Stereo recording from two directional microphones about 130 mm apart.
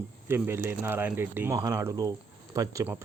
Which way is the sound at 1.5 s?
25° right (ahead or behind).